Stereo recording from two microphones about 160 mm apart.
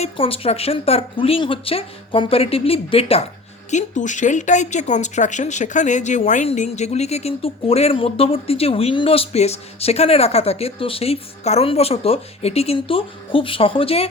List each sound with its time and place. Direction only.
0.0 s speech: 35° left (ahead or behind)
3.7 s speech: 50° left (ahead or behind)